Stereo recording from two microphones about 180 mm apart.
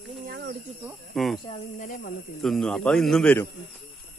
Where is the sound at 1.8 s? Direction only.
50° left (ahead or behind).